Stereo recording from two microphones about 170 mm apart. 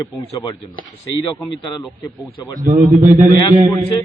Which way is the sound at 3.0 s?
15° right (ahead or behind).